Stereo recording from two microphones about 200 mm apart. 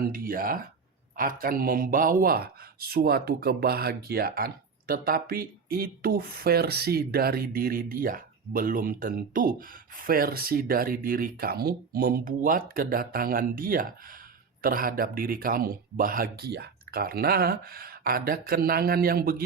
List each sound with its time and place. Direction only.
0.1 s a man's voice: 45° right (ahead or behind)